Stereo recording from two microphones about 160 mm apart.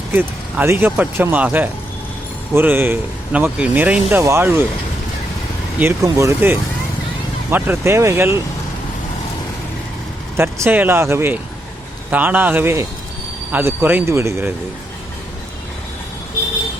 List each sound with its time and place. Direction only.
0.1 s speech: 10° right (ahead or behind)
5.8 s speech: 20° right (ahead or behind)
10.3 s speech: 15° right (ahead or behind)